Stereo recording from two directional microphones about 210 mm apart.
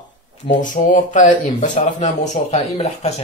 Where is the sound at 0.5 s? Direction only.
35° left (ahead or behind).